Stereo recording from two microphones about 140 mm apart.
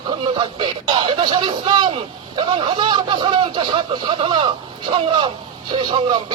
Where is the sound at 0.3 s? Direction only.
35° right (ahead or behind).